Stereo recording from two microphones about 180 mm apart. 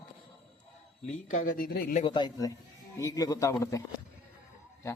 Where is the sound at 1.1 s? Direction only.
50° left (ahead or behind).